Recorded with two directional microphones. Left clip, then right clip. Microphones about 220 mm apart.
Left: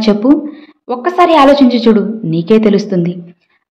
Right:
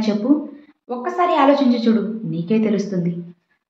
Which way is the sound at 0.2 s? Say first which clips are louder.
Left 8 dB; 45° left (ahead or behind).